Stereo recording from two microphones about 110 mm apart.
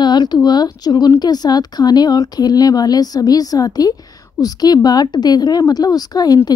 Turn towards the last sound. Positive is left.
turn(degrees=35)  # may be behind; listen again after turning